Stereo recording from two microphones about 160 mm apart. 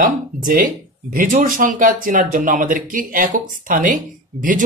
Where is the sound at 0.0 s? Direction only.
60° right (ahead or behind).